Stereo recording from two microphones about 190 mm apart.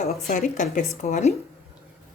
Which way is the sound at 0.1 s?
45° left (ahead or behind).